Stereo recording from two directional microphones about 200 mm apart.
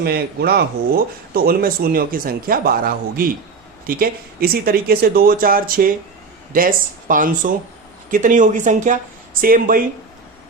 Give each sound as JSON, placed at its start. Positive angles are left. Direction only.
{"t": 0.0, "sound": "speech", "side_deg": -50}